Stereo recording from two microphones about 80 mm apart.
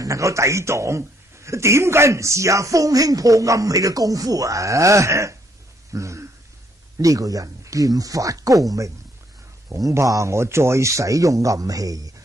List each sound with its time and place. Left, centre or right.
0.0 s a man's voice: right
5.9 s a sound: right
7.0 s speech: right